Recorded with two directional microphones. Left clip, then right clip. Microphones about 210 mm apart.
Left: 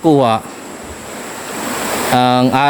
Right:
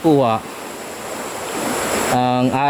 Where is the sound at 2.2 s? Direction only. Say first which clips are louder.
Left 8 dB; 25° left (ahead or behind).